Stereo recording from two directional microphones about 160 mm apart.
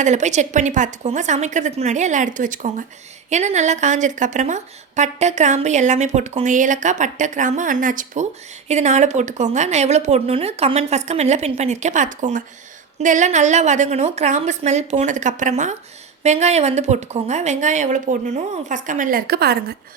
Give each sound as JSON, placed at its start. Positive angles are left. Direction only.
{"t": 0.0, "sound": "a woman's voice", "side_deg": -45}